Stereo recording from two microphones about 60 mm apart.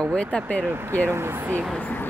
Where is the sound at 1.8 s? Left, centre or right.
Left.